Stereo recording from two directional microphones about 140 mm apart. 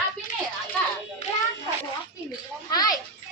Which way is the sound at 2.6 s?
30° left (ahead or behind).